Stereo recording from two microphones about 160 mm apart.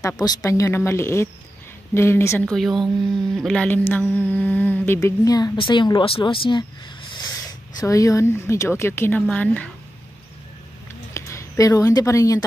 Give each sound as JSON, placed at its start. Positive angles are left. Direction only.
{"t": 0.0, "sound": "speech", "side_deg": 20}
{"t": 2.5, "sound": "a woman's voice", "side_deg": 0}
{"t": 11.1, "sound": "speech", "side_deg": 20}